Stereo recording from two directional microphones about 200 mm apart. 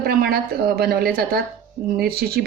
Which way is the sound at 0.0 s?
50° right (ahead or behind).